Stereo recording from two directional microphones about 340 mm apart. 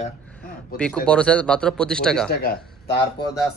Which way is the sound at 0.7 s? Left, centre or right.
Centre.